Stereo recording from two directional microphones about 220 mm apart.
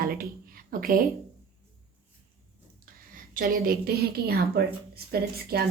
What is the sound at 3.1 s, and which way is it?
A woman's voice, 40° right (ahead or behind).